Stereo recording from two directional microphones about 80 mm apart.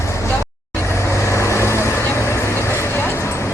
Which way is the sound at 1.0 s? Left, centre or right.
Left.